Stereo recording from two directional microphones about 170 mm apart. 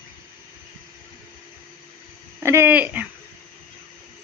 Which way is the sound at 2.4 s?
15° right (ahead or behind).